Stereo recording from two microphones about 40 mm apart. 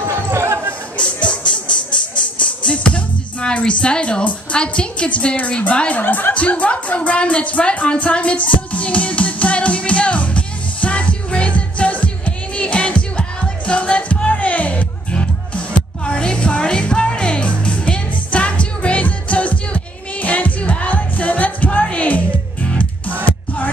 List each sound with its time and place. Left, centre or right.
0.0 s a sound: right
0.9 s music: left
5.8 s speech: left
6.3 s music: left